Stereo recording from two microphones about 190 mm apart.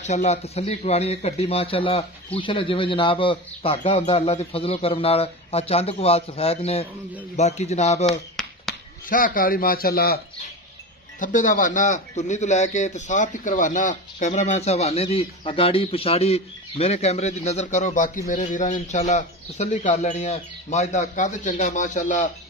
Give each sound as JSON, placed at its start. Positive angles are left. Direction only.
{"t": 0.0, "sound": "a man's voice", "side_deg": 35}
{"t": 8.1, "sound": "a sound", "side_deg": 0}
{"t": 9.1, "sound": "a man's voice", "side_deg": 45}